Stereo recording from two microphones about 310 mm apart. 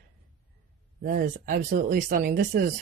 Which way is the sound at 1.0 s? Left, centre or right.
Right.